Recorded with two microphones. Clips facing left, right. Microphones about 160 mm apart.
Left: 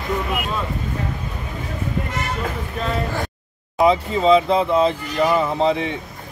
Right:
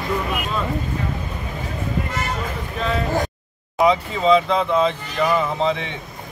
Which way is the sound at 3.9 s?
35° left (ahead or behind).